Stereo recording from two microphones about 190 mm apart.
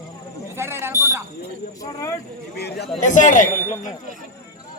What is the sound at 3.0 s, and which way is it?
Speech, 40° left (ahead or behind).